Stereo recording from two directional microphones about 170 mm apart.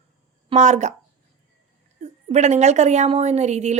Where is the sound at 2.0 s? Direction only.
40° right (ahead or behind).